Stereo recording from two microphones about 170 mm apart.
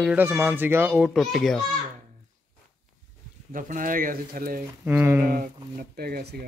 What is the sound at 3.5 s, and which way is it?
Speech, 50° right (ahead or behind).